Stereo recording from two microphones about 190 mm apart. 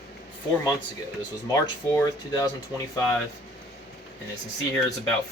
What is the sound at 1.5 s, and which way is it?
Speech, 15° left (ahead or behind).